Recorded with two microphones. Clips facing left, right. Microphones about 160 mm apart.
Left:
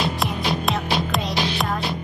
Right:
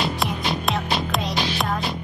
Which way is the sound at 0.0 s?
Centre (ahead or behind).